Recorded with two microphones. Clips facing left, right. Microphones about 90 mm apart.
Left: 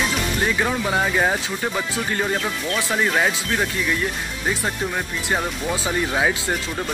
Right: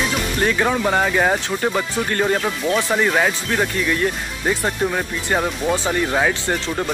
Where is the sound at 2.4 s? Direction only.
20° right (ahead or behind).